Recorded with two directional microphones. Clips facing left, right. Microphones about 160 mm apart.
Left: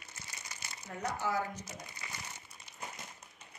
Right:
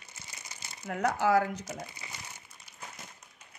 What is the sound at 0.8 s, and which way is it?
Speech, 90° right.